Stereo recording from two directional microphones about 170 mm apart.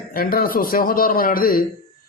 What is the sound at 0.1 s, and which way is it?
Speech, 60° left (ahead or behind).